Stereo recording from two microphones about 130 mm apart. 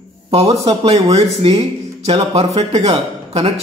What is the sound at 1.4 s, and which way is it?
Speech, 45° right (ahead or behind).